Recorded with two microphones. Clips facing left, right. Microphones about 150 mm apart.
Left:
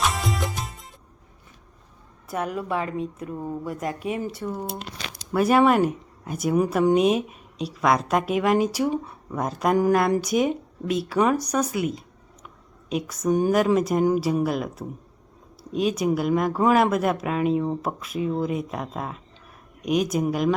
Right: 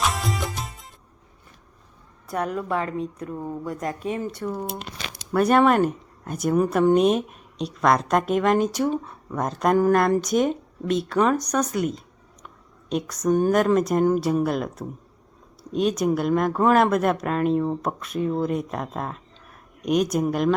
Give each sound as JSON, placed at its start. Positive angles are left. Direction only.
{"t": 0.0, "sound": "music", "side_deg": 0}
{"t": 2.2, "sound": "speech", "side_deg": 0}
{"t": 4.9, "sound": "a sound", "side_deg": -65}
{"t": 5.3, "sound": "speech", "side_deg": 5}